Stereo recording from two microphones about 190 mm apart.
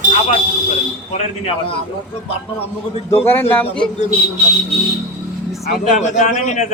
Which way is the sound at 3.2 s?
10° left (ahead or behind).